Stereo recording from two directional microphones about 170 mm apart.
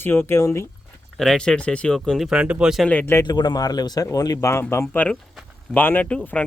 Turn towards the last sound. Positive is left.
turn(degrees=10)  # may be behind; listen again after turning